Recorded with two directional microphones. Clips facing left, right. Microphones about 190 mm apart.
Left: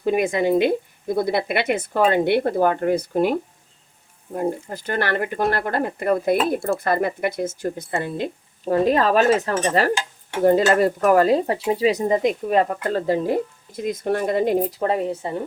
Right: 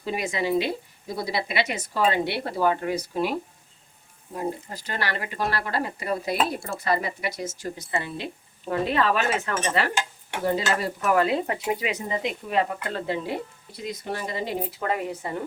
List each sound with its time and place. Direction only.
0.0 s speech: 50° left (ahead or behind)
4.4 s speech: 55° left (ahead or behind)
8.0 s speech: 45° left (ahead or behind)
10.4 s speech: 50° left (ahead or behind); by 15.3 s 30° left (ahead or behind)